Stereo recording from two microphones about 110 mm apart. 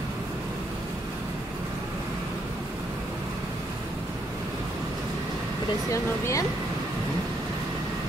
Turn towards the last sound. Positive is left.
turn(degrees=30)  # may be behind; listen again after turning